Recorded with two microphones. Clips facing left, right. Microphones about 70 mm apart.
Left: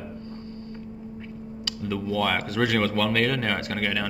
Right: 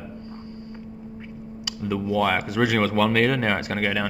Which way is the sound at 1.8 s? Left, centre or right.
Centre.